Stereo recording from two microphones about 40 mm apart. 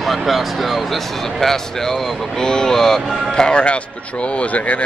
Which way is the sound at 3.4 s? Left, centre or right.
Left.